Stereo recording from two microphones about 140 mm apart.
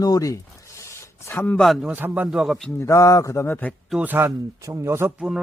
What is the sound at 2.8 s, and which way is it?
Speech, 20° left (ahead or behind).